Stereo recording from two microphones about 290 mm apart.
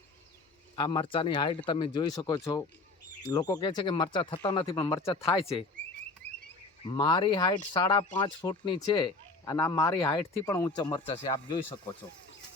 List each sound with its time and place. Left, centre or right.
0.8 s speech: centre
6.9 s speech: centre